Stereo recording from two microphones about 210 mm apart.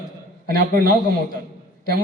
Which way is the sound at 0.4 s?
40° right (ahead or behind).